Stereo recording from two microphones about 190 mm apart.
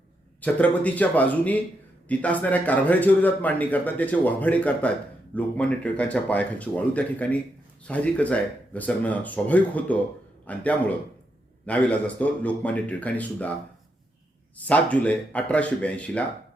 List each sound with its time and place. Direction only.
0.4 s a man's voice: 10° left (ahead or behind)
14.7 s a man's voice: 5° left (ahead or behind)